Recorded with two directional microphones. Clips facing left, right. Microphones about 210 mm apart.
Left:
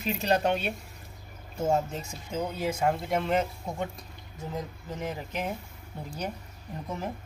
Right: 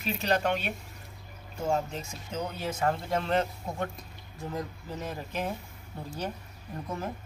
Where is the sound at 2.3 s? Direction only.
10° left (ahead or behind).